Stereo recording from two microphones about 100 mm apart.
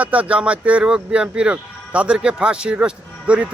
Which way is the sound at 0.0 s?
15° right (ahead or behind).